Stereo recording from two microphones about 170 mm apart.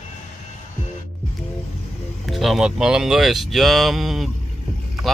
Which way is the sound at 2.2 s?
Centre (ahead or behind).